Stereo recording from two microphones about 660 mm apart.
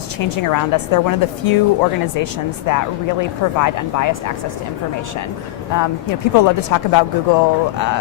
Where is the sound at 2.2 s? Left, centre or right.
Left.